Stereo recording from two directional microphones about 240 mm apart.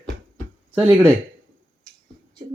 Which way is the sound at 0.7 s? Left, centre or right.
Centre.